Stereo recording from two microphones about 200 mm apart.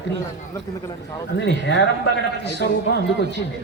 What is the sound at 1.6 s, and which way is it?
A man's voice, 65° left (ahead or behind).